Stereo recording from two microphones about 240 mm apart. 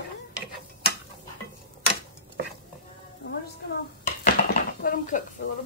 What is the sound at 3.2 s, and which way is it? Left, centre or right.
Music, left.